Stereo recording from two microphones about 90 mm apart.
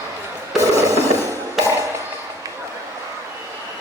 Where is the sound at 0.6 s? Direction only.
35° right (ahead or behind).